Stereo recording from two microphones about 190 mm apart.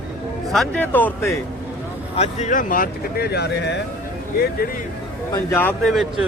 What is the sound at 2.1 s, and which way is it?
Speech, 35° left (ahead or behind).